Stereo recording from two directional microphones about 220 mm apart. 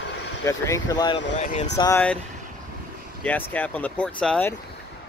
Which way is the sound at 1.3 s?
35° left (ahead or behind).